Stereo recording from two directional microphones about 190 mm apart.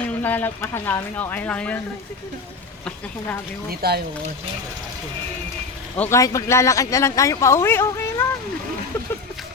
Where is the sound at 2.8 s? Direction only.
5° left (ahead or behind).